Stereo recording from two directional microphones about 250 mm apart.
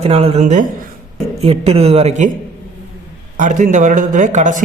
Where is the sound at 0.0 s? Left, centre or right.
Right.